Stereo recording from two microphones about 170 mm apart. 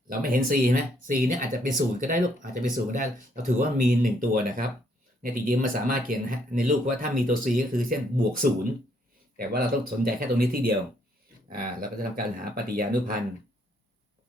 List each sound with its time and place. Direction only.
0.1 s speech: 55° right (ahead or behind)
9.5 s speech: 60° right (ahead or behind)